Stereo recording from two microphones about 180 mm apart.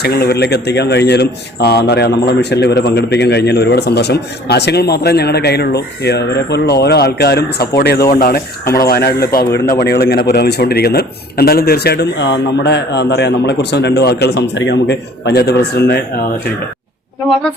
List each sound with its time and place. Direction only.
0.0 s speech: 65° left (ahead or behind)